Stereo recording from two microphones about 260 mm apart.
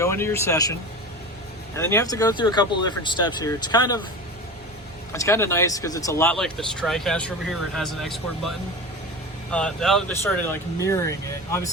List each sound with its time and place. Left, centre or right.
0.0 s speech: centre
5.1 s speech: centre